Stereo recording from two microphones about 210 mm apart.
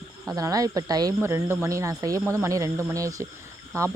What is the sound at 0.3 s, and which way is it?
Speech, 15° right (ahead or behind).